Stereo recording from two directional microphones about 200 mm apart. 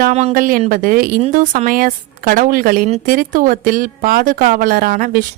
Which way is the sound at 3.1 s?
45° right (ahead or behind).